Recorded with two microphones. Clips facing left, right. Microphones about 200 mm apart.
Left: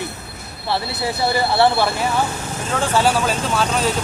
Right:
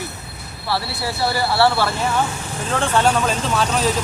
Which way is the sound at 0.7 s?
20° left (ahead or behind).